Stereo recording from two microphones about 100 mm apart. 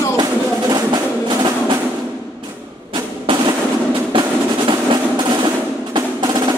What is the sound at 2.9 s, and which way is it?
Percussion, 50° right (ahead or behind).